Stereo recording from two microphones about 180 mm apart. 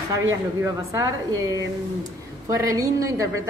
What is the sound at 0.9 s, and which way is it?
A woman's voice, 20° right (ahead or behind).